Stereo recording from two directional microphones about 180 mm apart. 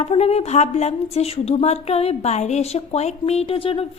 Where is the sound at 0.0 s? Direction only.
35° left (ahead or behind).